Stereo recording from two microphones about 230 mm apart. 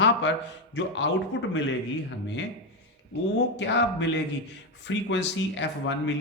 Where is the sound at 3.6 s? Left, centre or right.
Left.